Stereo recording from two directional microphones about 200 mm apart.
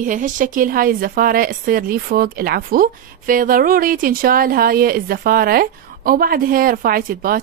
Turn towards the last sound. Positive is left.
turn(degrees=-45)  # may be behind; listen again after turning